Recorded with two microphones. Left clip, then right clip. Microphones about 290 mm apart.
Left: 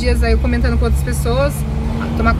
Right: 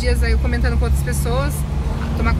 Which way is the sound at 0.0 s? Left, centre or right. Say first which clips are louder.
Left 5 dB; centre.